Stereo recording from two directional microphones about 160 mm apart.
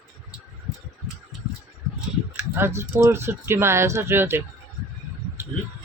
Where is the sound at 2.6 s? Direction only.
15° right (ahead or behind).